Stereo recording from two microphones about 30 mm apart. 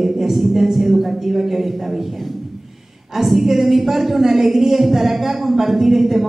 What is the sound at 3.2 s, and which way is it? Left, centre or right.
A woman's voice, centre.